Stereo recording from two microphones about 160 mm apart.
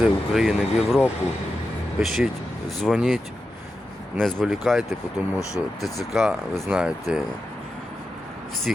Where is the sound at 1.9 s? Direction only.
Centre (ahead or behind).